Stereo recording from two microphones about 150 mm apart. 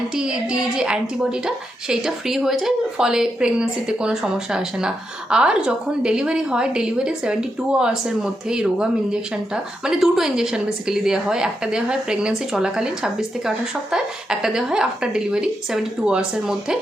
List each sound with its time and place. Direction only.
0.1 s a woman's voice: 5° right (ahead or behind)